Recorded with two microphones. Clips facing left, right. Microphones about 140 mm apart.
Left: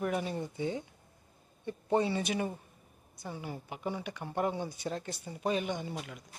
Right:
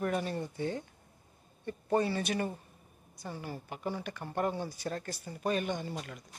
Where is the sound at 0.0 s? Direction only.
10° left (ahead or behind).